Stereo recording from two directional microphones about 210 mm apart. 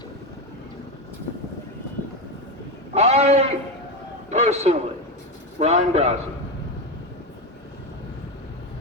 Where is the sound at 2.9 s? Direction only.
30° right (ahead or behind).